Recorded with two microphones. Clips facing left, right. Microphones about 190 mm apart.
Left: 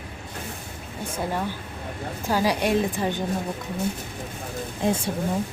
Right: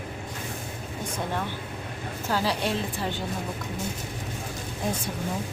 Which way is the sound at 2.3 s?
15° left (ahead or behind).